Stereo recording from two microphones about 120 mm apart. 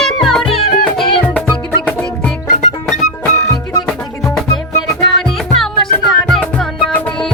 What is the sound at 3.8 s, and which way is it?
Music, 5° left (ahead or behind).